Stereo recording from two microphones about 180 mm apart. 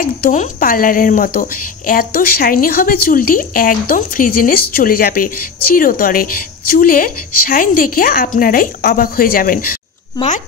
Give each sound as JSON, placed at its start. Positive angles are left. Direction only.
{"t": 0.0, "sound": "speech", "side_deg": 50}